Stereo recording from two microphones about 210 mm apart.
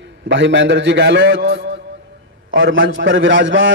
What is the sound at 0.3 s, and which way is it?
A man's voice, 60° right (ahead or behind).